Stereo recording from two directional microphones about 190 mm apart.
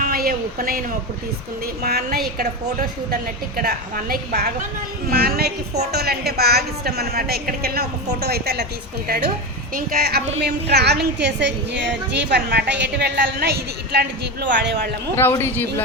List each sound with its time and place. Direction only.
0.0 s a sound: 50° right (ahead or behind)
1.8 s a woman's voice: 50° right (ahead or behind)
3.6 s a woman's voice: 50° right (ahead or behind)
14.5 s a man's voice: 65° right (ahead or behind)
15.1 s a man's voice: 10° left (ahead or behind)